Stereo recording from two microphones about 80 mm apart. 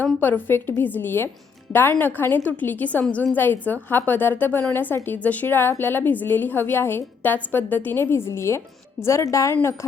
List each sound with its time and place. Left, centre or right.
0.0 s a woman's voice: left